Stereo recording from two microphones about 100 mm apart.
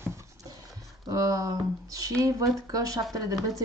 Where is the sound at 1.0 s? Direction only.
35° right (ahead or behind).